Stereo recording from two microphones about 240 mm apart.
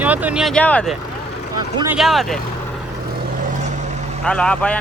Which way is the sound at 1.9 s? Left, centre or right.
Centre.